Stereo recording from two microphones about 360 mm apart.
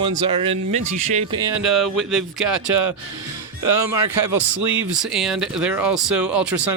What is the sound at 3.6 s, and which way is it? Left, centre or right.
Speech, centre.